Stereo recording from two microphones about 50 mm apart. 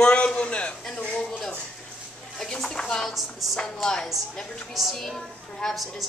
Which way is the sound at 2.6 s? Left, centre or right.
Centre.